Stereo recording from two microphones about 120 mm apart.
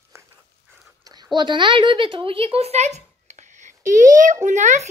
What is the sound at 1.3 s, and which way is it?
A child's voice, 40° right (ahead or behind).